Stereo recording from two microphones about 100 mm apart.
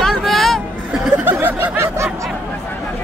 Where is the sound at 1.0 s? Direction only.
15° right (ahead or behind).